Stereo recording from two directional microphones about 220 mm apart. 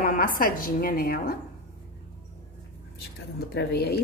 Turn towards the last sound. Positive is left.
turn(degrees=50)  # may be behind; listen again after turning